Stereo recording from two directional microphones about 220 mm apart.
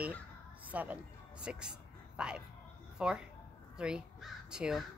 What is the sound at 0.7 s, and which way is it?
Speech, 5° right (ahead or behind).